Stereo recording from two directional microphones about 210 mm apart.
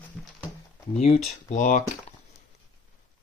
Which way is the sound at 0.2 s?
Centre (ahead or behind).